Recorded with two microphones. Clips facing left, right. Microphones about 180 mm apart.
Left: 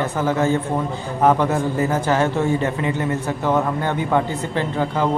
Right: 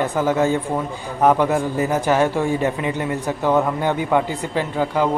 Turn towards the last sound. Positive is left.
turn(degrees=-10)  # may be behind; listen again after turning